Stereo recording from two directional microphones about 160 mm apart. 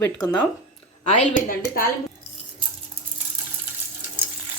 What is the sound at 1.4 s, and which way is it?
Speech, 65° left (ahead or behind).